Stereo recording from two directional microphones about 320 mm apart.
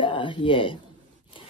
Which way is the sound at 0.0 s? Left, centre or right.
Centre.